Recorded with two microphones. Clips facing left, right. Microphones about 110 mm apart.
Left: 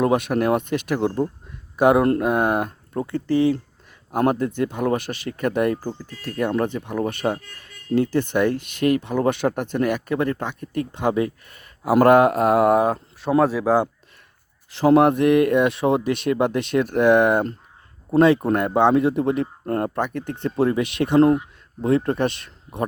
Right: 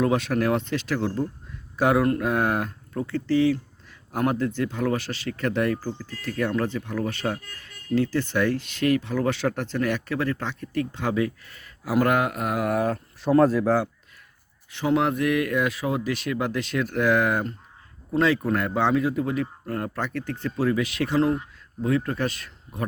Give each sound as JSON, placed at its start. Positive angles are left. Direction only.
{"t": 0.1, "sound": "speech", "side_deg": 15}
{"t": 2.0, "sound": "speech", "side_deg": 30}
{"t": 2.2, "sound": "speech", "side_deg": 15}
{"t": 12.0, "sound": "speech", "side_deg": 30}
{"t": 13.4, "sound": "speech", "side_deg": 5}
{"t": 14.8, "sound": "speech", "side_deg": 40}
{"t": 15.1, "sound": "speech", "side_deg": 25}
{"t": 20.0, "sound": "speech", "side_deg": 20}